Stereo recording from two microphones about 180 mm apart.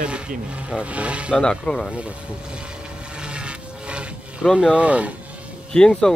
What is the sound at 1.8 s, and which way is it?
Speech, 5° right (ahead or behind).